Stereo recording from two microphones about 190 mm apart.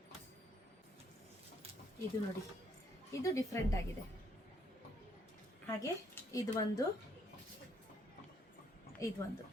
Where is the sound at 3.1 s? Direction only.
15° left (ahead or behind).